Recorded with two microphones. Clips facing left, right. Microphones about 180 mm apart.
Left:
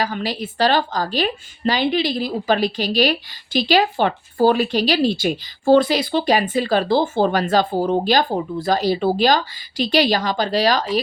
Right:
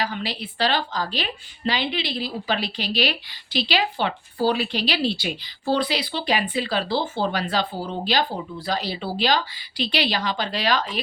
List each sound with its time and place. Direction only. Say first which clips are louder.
0.0 s a woman's voice: left 5 dB; 45° left (ahead or behind)